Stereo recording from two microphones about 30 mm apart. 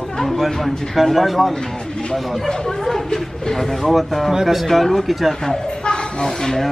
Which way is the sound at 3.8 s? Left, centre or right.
Centre.